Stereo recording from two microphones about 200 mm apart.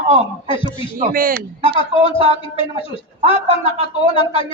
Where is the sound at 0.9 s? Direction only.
45° right (ahead or behind).